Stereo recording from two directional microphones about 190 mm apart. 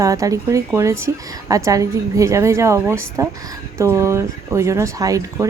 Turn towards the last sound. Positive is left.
turn(degrees=-15)  # may be behind; listen again after turning